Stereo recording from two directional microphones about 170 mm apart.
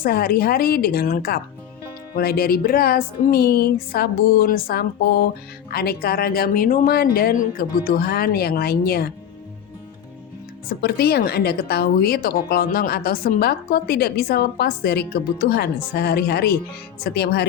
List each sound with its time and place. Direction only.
0.0 s speech: 60° left (ahead or behind)
10.7 s a woman's voice: 70° left (ahead or behind)